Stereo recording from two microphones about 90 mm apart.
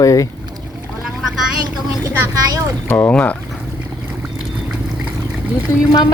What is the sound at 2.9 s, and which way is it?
Speech, 30° left (ahead or behind).